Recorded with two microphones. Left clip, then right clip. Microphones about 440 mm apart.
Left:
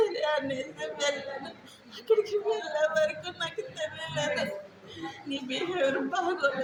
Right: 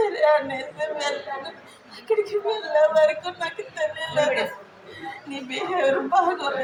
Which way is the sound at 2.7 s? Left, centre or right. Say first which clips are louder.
Right 11 dB; left.